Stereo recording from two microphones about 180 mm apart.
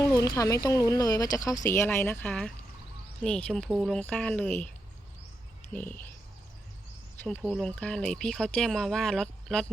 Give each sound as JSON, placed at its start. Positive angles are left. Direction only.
{"t": 0.0, "sound": "speech", "side_deg": 20}
{"t": 5.7, "sound": "speech", "side_deg": 10}
{"t": 7.3, "sound": "speech", "side_deg": 5}